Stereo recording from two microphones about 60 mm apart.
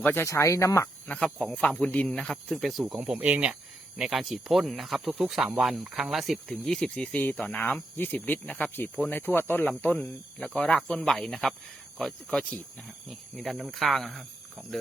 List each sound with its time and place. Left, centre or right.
0.0 s speech: left
0.3 s speech: left
1.0 s speech: centre
2.8 s speech: centre; by 8.7 s left
9.0 s speech: left; by 14.3 s centre